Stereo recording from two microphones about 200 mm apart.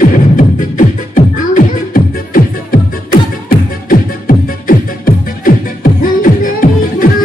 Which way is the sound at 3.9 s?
45° left (ahead or behind).